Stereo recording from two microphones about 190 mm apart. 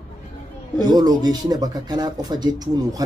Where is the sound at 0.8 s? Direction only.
20° right (ahead or behind).